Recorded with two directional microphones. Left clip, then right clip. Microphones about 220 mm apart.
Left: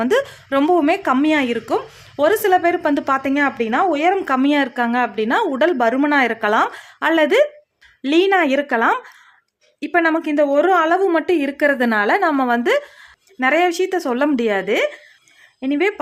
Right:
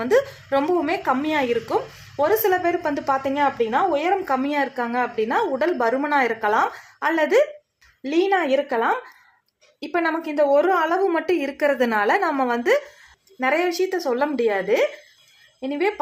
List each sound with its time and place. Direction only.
0.0 s a woman's voice: 40° left (ahead or behind)